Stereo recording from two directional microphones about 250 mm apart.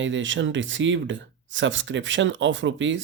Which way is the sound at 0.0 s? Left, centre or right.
Right.